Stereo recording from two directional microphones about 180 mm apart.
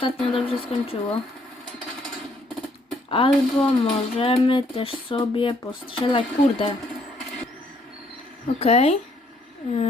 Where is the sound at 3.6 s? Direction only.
30° left (ahead or behind).